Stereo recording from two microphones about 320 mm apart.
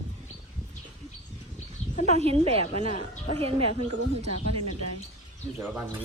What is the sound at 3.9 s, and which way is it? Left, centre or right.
Speech, right.